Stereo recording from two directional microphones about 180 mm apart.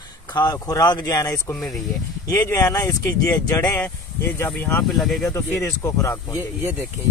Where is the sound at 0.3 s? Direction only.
20° left (ahead or behind); by 5.3 s centre (ahead or behind).